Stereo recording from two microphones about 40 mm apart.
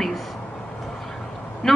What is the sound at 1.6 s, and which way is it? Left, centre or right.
Speech, centre.